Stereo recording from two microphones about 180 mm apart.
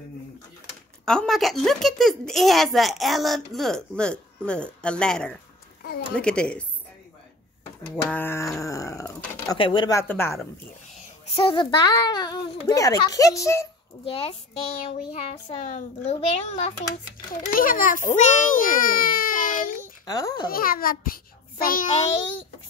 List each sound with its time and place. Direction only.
1.0 s a woman's voice: 5° left (ahead or behind)
8.0 s a woman's voice: 10° left (ahead or behind)
11.3 s a child's voice: 30° left (ahead or behind)
14.0 s a child's voice: 30° left (ahead or behind)
17.5 s a child's voice: 50° left (ahead or behind)
19.8 s a sound: 20° left (ahead or behind)
20.4 s a child's voice: 55° left (ahead or behind)